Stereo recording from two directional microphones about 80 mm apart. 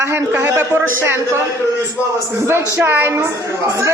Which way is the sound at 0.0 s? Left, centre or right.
Right.